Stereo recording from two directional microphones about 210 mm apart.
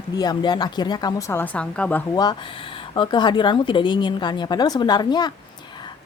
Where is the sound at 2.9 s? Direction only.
20° left (ahead or behind).